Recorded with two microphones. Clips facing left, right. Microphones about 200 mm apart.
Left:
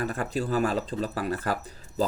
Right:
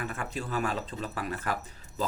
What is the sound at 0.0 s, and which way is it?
Speech, 35° left (ahead or behind).